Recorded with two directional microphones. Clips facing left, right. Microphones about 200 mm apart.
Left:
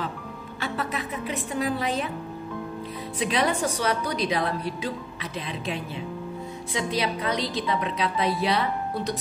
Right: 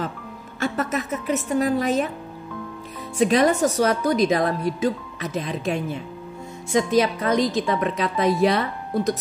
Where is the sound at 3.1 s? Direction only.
45° right (ahead or behind).